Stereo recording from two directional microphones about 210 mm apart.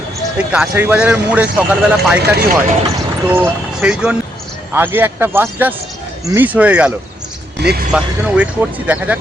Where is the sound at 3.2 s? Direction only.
10° right (ahead or behind).